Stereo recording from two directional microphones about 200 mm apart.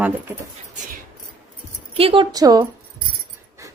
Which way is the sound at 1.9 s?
30° right (ahead or behind).